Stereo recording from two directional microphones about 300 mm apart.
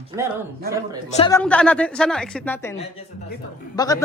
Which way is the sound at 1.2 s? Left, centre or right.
Centre.